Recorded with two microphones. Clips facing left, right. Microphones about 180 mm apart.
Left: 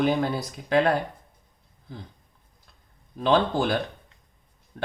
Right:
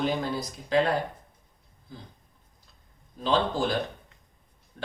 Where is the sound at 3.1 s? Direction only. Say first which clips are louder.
Left 4 dB; 60° left (ahead or behind).